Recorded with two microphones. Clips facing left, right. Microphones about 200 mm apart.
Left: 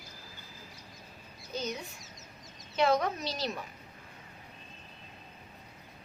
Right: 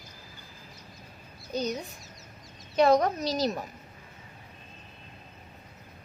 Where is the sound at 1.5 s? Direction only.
40° right (ahead or behind).